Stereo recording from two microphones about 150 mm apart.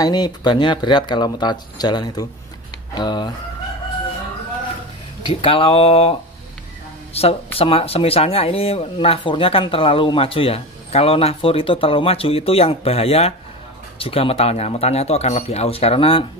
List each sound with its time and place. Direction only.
0.0 s speech: 25° left (ahead or behind)
5.2 s speech: 35° left (ahead or behind)
7.2 s speech: 40° left (ahead or behind)